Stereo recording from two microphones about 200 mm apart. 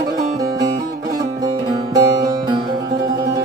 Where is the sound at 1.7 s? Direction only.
20° right (ahead or behind).